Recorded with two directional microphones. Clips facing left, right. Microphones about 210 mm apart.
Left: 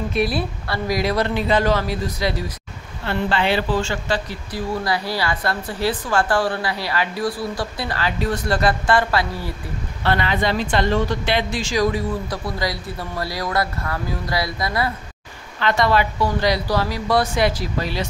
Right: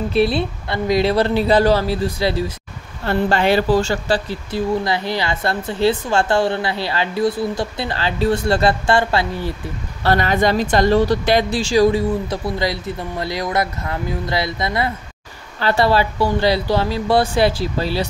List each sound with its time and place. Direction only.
0.1 s speech: 25° right (ahead or behind)
3.1 s speech: 45° right (ahead or behind); by 9.5 s 25° right (ahead or behind)
10.0 s speech: 45° right (ahead or behind)